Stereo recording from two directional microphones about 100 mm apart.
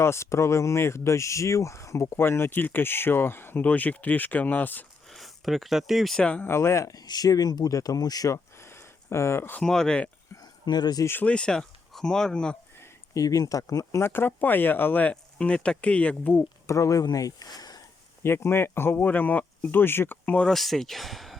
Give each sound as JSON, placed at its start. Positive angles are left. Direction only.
{"t": 0.0, "sound": "speech", "side_deg": 25}
{"t": 5.1, "sound": "speech", "side_deg": 0}
{"t": 6.5, "sound": "speech", "side_deg": 30}
{"t": 8.6, "sound": "a sound", "side_deg": 25}
{"t": 9.6, "sound": "speech", "side_deg": 5}
{"t": 10.7, "sound": "speech", "side_deg": 45}
{"t": 11.0, "sound": "speech", "side_deg": 20}
{"t": 13.1, "sound": "speech", "side_deg": 35}
{"t": 14.1, "sound": "speech", "side_deg": 20}
{"t": 16.6, "sound": "speech", "side_deg": 30}
{"t": 18.2, "sound": "speech", "side_deg": 25}
{"t": 20.4, "sound": "speech", "side_deg": 0}